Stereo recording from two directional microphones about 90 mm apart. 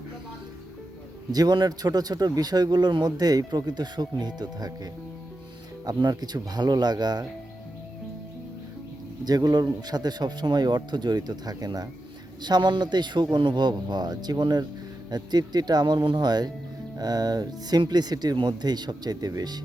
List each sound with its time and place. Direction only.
1.3 s a man's voice: 50° right (ahead or behind)
9.2 s a man's voice: 50° right (ahead or behind)